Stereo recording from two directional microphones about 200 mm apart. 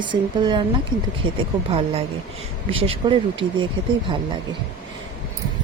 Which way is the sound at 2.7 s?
25° right (ahead or behind).